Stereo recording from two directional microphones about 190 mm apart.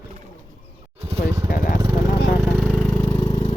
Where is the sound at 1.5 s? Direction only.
45° left (ahead or behind).